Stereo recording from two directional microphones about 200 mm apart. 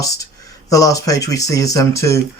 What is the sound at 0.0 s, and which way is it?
Speech, 15° left (ahead or behind).